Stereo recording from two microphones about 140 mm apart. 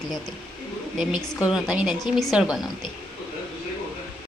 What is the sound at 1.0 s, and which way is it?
A woman's voice, 5° right (ahead or behind).